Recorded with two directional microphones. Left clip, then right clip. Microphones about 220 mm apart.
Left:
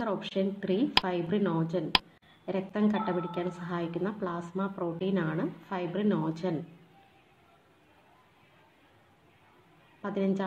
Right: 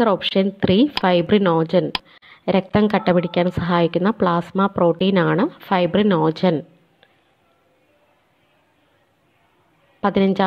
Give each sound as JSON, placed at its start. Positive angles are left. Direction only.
{"t": 0.0, "sound": "a woman's voice", "side_deg": -35}
{"t": 10.0, "sound": "a woman's voice", "side_deg": -35}